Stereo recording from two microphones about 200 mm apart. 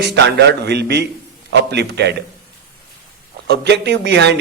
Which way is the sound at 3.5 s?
55° right (ahead or behind).